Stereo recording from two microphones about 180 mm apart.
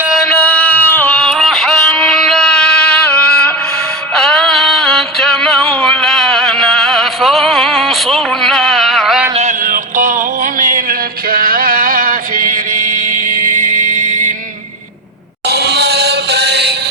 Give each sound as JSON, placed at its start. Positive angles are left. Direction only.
{"t": 0.6, "sound": "music", "side_deg": 10}
{"t": 1.2, "sound": "music", "side_deg": 0}
{"t": 9.3, "sound": "a sound", "side_deg": -40}
{"t": 11.3, "sound": "mantra", "side_deg": -55}
{"t": 13.3, "sound": "a sound", "side_deg": -45}
{"t": 15.4, "sound": "chant", "side_deg": -65}